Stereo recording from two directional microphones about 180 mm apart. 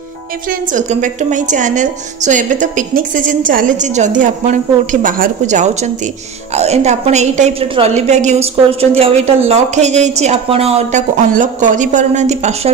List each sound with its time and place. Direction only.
0.5 s a woman's voice: 45° right (ahead or behind)